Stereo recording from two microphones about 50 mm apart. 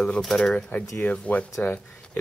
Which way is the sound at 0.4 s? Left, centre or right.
Left.